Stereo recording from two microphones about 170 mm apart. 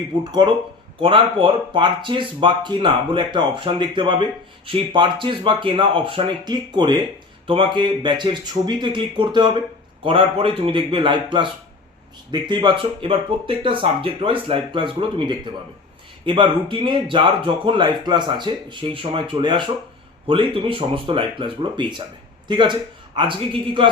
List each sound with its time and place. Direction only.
0.3 s speech: 25° right (ahead or behind)